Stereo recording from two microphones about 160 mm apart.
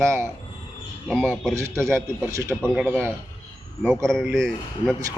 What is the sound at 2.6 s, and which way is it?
Speech, centre (ahead or behind).